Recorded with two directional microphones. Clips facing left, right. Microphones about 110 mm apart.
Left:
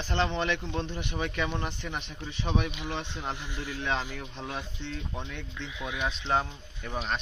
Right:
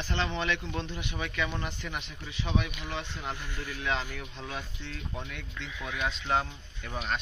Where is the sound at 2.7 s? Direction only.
20° left (ahead or behind).